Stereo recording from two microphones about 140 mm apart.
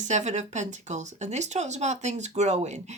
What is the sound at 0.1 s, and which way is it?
Speech, 55° right (ahead or behind).